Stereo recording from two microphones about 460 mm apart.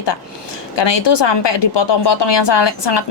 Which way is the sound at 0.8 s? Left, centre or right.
Left.